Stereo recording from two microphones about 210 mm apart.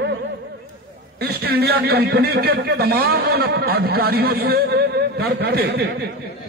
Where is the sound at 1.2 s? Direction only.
50° right (ahead or behind).